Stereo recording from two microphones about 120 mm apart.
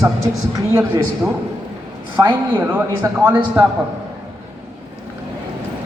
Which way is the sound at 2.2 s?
30° right (ahead or behind).